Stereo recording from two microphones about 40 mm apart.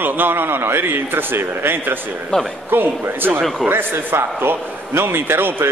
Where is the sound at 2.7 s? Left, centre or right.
Right.